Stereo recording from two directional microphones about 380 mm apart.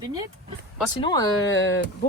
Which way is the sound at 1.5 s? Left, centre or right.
Left.